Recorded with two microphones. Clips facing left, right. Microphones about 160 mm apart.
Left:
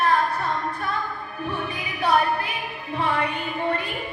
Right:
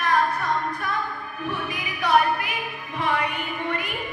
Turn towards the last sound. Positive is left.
turn(degrees=30)  # may be behind; listen again after turning